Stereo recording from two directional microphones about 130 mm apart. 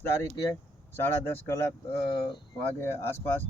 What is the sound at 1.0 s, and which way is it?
Speech, 15° left (ahead or behind).